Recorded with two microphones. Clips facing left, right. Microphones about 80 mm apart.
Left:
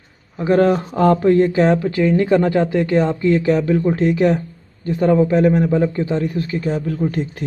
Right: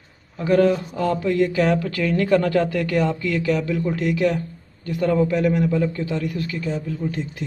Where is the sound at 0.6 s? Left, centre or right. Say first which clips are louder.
Left 4 dB; left.